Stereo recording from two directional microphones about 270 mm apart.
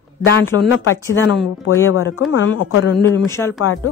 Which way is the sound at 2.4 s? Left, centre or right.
Left.